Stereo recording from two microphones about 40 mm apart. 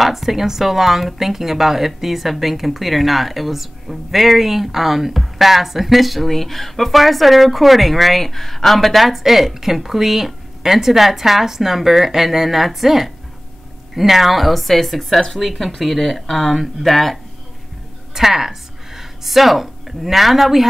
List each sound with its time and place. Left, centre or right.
0.0 s speech: centre
18.1 s speech: centre